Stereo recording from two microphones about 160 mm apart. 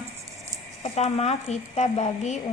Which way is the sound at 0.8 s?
40° left (ahead or behind).